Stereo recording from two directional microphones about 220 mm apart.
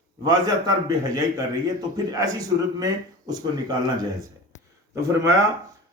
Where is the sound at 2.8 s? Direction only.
20° right (ahead or behind).